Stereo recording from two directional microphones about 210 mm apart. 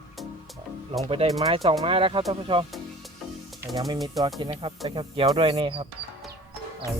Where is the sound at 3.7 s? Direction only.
15° right (ahead or behind).